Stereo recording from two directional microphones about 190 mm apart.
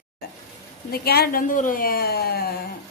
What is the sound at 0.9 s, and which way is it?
A woman's voice, 55° left (ahead or behind).